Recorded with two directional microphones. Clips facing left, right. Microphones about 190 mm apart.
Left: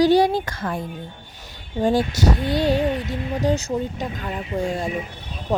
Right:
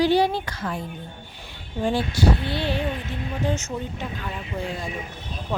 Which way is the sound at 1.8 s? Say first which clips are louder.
Left 3 dB; 45° left (ahead or behind).